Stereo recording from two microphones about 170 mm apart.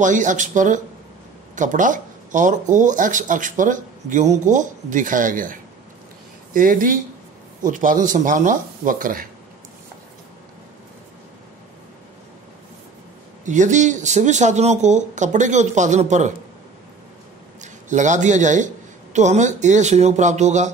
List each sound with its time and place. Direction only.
0.0 s speech: 45° right (ahead or behind)
13.5 s speech: 45° right (ahead or behind)
17.6 s a man's voice: 45° right (ahead or behind)